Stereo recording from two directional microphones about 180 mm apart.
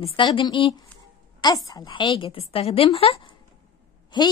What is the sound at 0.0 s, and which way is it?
A woman's voice, 30° left (ahead or behind).